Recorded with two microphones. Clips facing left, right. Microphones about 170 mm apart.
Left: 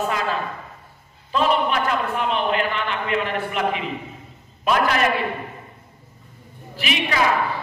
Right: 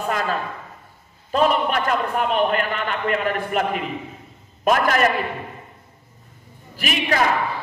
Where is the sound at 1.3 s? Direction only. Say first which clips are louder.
Right 1 dB; 45° right (ahead or behind).